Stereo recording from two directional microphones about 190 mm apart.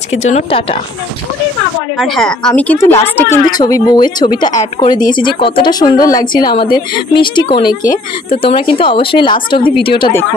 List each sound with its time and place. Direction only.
0.1 s a woman's voice: 35° left (ahead or behind)
2.0 s a woman's voice: centre (ahead or behind); by 10.1 s 25° left (ahead or behind)